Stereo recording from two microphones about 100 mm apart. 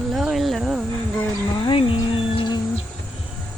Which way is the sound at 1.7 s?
60° left (ahead or behind).